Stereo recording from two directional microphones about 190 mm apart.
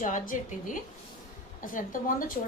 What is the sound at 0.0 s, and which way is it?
A woman's voice, 45° left (ahead or behind).